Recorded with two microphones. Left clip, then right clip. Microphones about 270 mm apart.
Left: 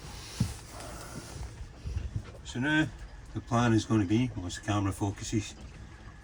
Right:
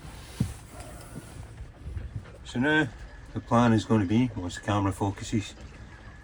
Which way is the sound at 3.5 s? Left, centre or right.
Centre.